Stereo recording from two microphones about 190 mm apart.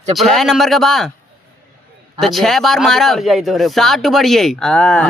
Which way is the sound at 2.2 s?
Centre (ahead or behind).